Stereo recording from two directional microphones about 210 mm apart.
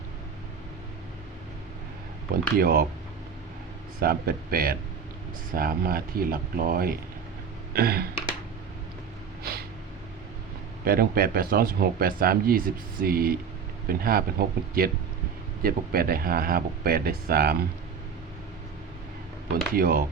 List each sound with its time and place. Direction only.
2.6 s speech: 45° right (ahead or behind)
4.0 s speech: 45° right (ahead or behind)
9.4 s a sound: 45° right (ahead or behind)
10.8 s speech: 45° right (ahead or behind)
19.7 s speech: 45° right (ahead or behind)